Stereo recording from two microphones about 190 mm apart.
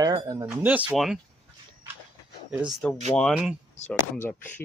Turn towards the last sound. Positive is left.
turn(degrees=10)  # may be behind; listen again after turning